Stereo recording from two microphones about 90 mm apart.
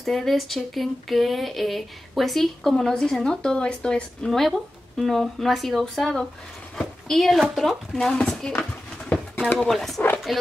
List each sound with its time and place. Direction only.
0.0 s speech: 5° left (ahead or behind)